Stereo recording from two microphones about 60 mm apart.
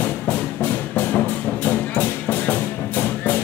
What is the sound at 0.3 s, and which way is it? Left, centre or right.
Music, left.